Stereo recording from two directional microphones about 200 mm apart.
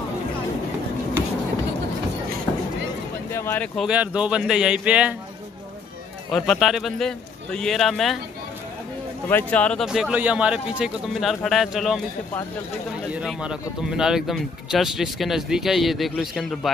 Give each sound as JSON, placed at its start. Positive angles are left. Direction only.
{"t": 3.3, "sound": "speech", "side_deg": 15}
{"t": 6.3, "sound": "speech", "side_deg": 0}
{"t": 9.3, "sound": "speech", "side_deg": 10}
{"t": 13.1, "sound": "speech", "side_deg": -5}